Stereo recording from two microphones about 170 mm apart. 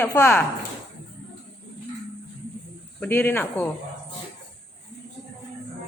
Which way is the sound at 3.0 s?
10° left (ahead or behind).